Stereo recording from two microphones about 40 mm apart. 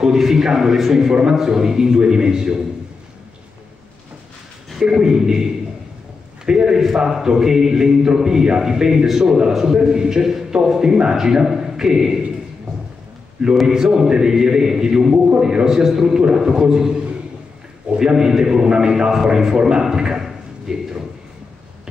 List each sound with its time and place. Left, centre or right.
0.0 s a man's voice: centre
4.7 s a man's voice: centre
13.7 s a man's voice: centre